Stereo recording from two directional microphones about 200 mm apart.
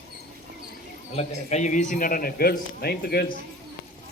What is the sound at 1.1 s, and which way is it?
A man's voice, 35° left (ahead or behind).